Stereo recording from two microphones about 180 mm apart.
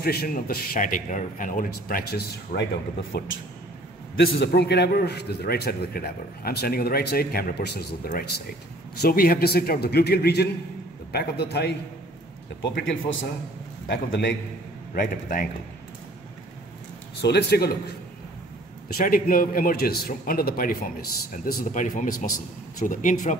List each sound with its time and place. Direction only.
0.0 s a man's voice: 60° left (ahead or behind); by 14.3 s 75° left (ahead or behind)
15.0 s a man's voice: 50° left (ahead or behind)
17.2 s a man's voice: 65° left (ahead or behind)
18.9 s a man's voice: 55° left (ahead or behind)